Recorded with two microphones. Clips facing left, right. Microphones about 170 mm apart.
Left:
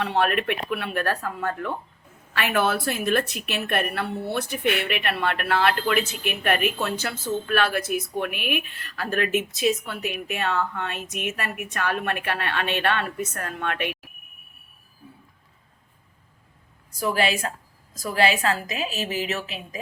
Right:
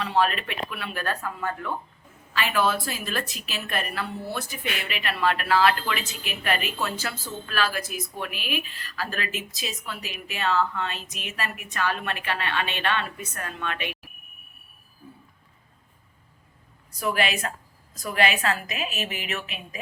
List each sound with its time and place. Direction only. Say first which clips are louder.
0.0 s a woman's voice: left 1 dB; 60° left (ahead or behind)
17.2 s a woman's voice: left 3 dB; 35° left (ahead or behind)